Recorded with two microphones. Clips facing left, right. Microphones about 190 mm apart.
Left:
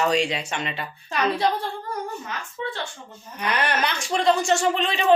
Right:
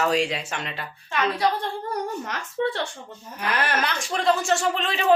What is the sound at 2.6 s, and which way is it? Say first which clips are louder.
Speech: right 7 dB; 60° right (ahead or behind).